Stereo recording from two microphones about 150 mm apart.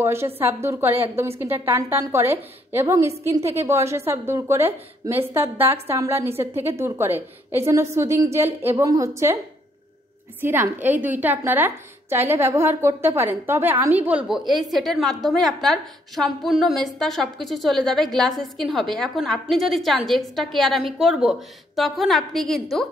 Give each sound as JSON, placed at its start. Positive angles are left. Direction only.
{"t": 0.0, "sound": "a woman's voice", "side_deg": -15}
{"t": 10.4, "sound": "a woman's voice", "side_deg": -15}